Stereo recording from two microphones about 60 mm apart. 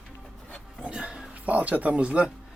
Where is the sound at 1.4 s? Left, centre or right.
Right.